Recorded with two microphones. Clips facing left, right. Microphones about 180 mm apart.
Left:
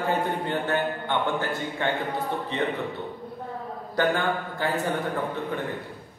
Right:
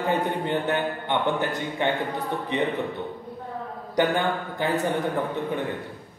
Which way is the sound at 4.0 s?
15° right (ahead or behind).